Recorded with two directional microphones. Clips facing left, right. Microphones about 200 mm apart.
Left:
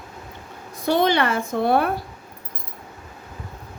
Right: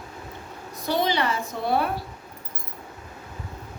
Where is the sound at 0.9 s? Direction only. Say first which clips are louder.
Left 5 dB; 55° left (ahead or behind).